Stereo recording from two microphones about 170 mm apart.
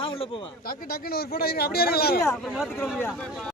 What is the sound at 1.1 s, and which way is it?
Speech, 65° left (ahead or behind).